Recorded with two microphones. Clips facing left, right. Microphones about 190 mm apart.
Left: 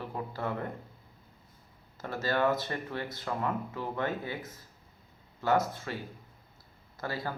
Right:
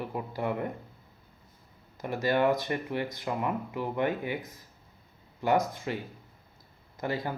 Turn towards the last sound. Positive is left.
turn(degrees=-20)  # may be behind; listen again after turning